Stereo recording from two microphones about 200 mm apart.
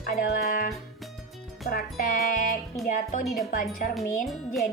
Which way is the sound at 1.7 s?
45° left (ahead or behind).